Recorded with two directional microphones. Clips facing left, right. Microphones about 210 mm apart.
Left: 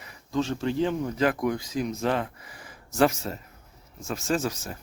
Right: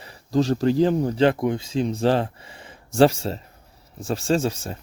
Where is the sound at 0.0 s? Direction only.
35° right (ahead or behind).